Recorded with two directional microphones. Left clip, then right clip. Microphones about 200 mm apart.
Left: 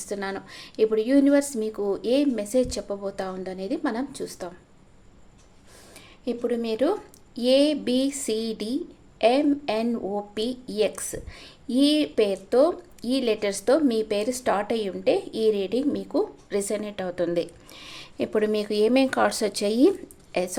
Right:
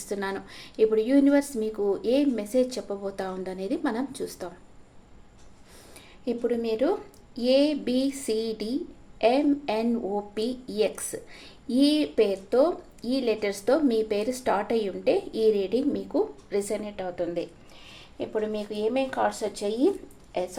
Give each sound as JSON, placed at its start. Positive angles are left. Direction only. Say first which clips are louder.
{"t": 0.1, "sound": "speech", "louder": "even", "side_deg": 10}
{"t": 6.2, "sound": "a woman's voice", "louder": "even", "side_deg": 20}